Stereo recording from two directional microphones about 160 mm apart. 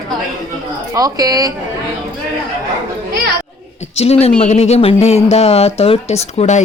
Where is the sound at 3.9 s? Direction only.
40° left (ahead or behind).